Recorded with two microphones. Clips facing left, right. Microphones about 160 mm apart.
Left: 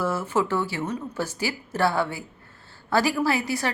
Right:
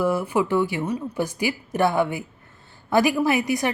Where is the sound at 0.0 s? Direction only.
15° right (ahead or behind).